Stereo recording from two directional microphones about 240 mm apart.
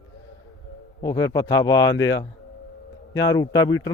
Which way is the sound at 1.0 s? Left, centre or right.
Centre.